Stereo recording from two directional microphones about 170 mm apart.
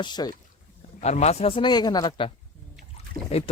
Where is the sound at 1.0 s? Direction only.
40° left (ahead or behind).